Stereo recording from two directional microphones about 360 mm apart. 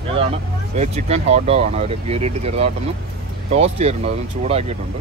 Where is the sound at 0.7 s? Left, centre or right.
Centre.